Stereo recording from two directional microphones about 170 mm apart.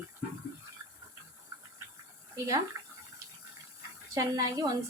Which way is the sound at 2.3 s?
20° right (ahead or behind).